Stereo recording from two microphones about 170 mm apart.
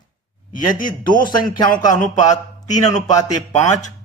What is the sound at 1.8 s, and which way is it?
Speech, 20° left (ahead or behind).